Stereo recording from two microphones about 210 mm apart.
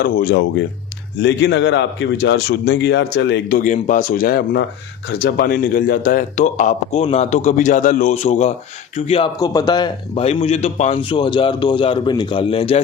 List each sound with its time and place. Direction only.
0.0 s a man's voice: 45° left (ahead or behind)
3.6 s a man's voice: 35° left (ahead or behind)